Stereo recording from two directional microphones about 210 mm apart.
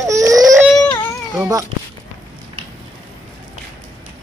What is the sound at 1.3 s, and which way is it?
Babbling, 10° right (ahead or behind).